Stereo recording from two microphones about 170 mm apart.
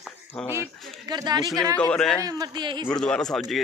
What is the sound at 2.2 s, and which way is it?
Speech, 25° right (ahead or behind).